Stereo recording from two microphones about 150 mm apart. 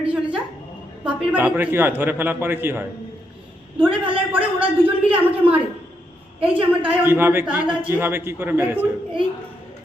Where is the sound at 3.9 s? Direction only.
35° right (ahead or behind).